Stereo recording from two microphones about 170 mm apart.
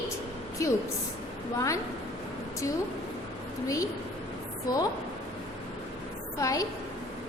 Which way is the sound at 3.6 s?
20° left (ahead or behind).